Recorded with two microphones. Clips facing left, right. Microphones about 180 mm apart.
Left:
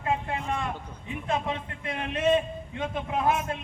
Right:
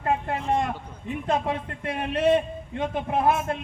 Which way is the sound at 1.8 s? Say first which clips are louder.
Right 4 dB; 60° right (ahead or behind).